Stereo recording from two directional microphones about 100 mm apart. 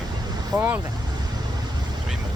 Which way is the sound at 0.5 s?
15° right (ahead or behind).